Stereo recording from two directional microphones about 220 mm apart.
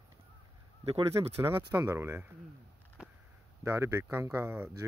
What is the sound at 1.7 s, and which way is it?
Speech, 15° right (ahead or behind).